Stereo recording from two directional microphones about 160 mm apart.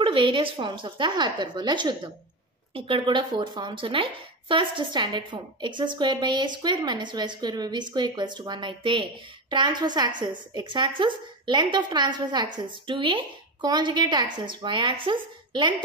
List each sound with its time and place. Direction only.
0.0 s speech: 30° right (ahead or behind)